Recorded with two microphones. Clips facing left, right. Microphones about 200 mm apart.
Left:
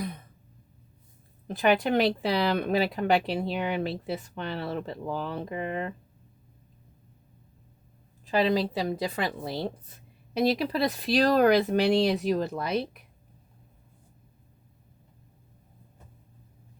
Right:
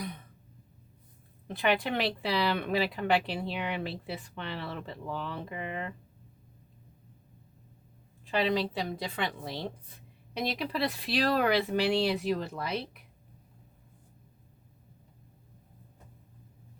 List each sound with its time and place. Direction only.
1.5 s speech: 45° left (ahead or behind)
8.2 s a sound: 40° left (ahead or behind)
8.9 s speech: 40° left (ahead or behind)